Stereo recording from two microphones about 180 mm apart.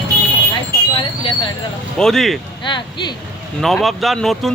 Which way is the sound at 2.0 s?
Centre (ahead or behind).